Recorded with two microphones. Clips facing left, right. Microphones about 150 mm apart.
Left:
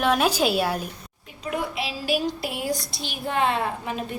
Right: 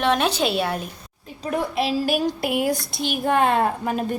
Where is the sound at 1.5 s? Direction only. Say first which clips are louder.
Right 6 dB; 45° right (ahead or behind).